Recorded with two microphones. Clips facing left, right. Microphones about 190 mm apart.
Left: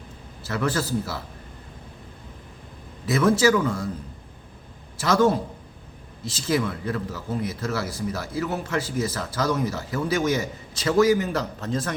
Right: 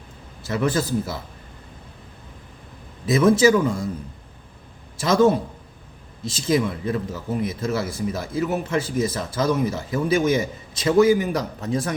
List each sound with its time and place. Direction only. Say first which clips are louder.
0.4 s speech: right 3 dB; 20° right (ahead or behind)
3.1 s speech: right 3 dB; 20° right (ahead or behind)
4.9 s speech: right 3 dB; 20° right (ahead or behind)